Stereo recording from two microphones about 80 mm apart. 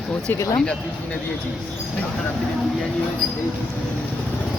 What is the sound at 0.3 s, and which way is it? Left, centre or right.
Speech, left.